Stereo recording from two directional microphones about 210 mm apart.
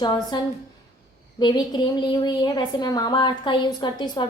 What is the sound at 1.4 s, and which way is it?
A woman's voice, 20° left (ahead or behind).